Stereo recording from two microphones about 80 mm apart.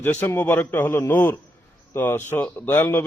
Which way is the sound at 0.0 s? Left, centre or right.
Left.